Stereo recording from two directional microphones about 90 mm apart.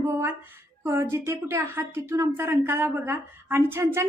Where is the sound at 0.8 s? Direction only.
30° right (ahead or behind).